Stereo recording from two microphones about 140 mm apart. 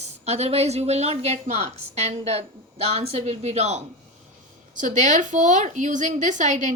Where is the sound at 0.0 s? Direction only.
50° right (ahead or behind).